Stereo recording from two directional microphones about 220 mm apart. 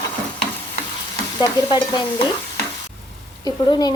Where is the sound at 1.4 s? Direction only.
20° left (ahead or behind).